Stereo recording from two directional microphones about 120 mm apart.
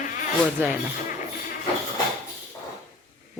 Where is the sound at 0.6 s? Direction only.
20° right (ahead or behind).